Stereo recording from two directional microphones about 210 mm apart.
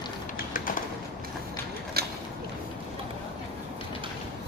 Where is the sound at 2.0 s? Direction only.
50° right (ahead or behind).